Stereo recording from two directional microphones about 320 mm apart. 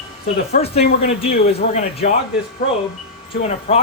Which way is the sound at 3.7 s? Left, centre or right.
Centre.